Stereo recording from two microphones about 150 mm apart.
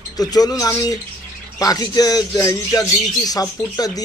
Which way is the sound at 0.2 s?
25° left (ahead or behind).